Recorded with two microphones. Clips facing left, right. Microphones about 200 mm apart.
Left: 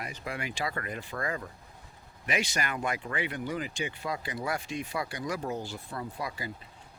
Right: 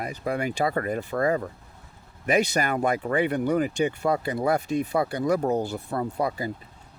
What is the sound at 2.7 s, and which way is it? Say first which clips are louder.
Speech: right 9 dB; 40° right (ahead or behind).